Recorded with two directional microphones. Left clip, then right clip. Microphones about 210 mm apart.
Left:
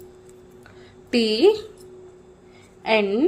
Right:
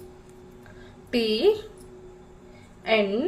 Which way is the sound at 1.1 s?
40° left (ahead or behind).